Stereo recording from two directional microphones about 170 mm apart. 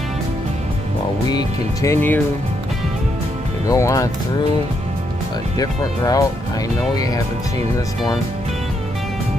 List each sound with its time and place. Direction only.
1.3 s speech: 20° left (ahead or behind)
3.6 s speech: 20° left (ahead or behind)
5.6 s speech: 20° left (ahead or behind)